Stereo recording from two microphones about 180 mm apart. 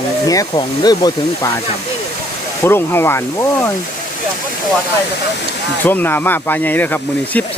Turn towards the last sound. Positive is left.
turn(degrees=10)  # may be behind; listen again after turning